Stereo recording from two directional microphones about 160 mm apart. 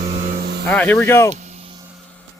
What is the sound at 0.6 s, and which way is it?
Speech, 5° left (ahead or behind).